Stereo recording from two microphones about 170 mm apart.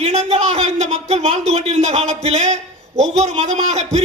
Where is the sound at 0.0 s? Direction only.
40° right (ahead or behind).